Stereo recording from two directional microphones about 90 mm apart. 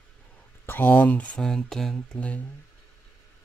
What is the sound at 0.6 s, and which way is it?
Speech, 20° left (ahead or behind).